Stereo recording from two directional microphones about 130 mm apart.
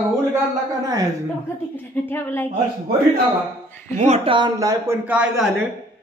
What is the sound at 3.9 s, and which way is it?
Speech, 55° right (ahead or behind).